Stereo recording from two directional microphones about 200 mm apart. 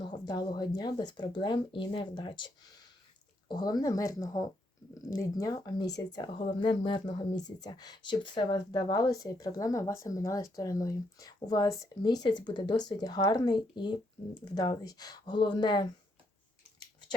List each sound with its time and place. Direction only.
0.0 s speech: 20° left (ahead or behind)
3.5 s speech: 20° left (ahead or behind)